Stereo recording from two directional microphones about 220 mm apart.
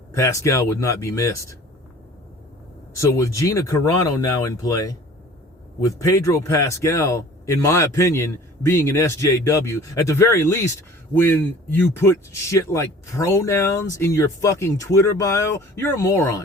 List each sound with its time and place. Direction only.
0.1 s speech: 15° left (ahead or behind)
2.9 s speech: 15° left (ahead or behind)